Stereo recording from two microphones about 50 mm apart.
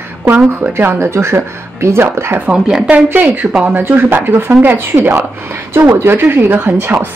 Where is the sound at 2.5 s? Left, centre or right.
Right.